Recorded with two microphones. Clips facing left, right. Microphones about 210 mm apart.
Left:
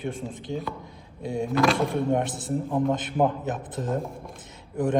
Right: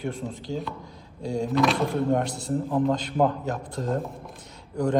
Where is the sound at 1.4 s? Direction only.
Centre (ahead or behind).